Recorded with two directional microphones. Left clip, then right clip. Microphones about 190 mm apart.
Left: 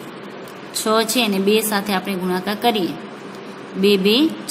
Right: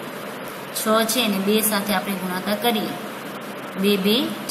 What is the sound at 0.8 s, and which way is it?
A woman's voice, 50° left (ahead or behind).